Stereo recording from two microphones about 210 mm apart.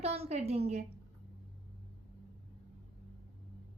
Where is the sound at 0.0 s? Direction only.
30° right (ahead or behind).